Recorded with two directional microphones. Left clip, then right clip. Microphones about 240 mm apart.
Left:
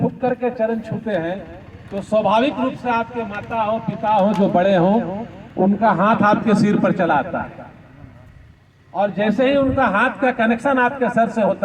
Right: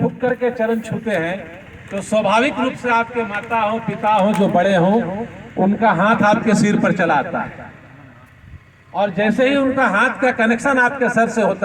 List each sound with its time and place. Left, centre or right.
0.0 s a man's voice: right
9.0 s a man's voice: right